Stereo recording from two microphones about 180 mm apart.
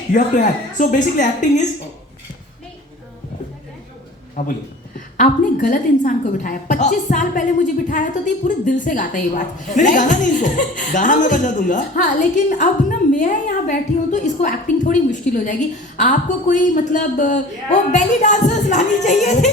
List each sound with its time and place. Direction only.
0.1 s a woman's voice: 45° left (ahead or behind)
4.4 s a woman's voice: 45° left (ahead or behind)